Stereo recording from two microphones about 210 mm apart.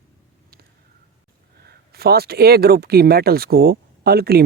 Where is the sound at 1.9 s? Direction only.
50° right (ahead or behind).